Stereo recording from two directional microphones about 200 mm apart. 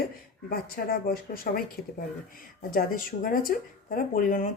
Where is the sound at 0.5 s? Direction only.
45° left (ahead or behind).